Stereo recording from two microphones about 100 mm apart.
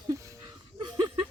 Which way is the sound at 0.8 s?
50° right (ahead or behind).